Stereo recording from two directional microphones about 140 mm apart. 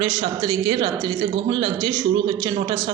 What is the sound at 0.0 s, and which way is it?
A woman's voice, 30° right (ahead or behind).